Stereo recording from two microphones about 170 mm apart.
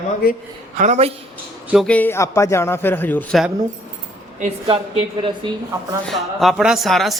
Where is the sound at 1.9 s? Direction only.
10° left (ahead or behind).